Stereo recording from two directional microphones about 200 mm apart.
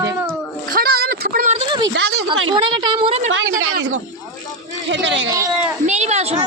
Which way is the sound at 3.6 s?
75° right (ahead or behind).